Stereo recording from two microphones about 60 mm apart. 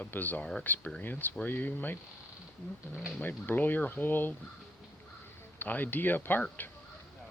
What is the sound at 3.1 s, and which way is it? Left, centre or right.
Speech, left.